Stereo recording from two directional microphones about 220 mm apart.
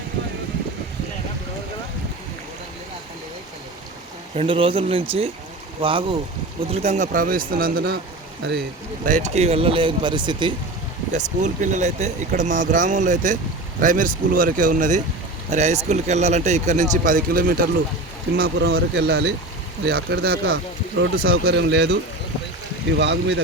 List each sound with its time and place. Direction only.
4.4 s speech: 25° right (ahead or behind); by 8.6 s 50° right (ahead or behind)
9.0 s speech: 35° right (ahead or behind)
11.1 s speech: 35° right (ahead or behind); by 23.4 s 55° right (ahead or behind)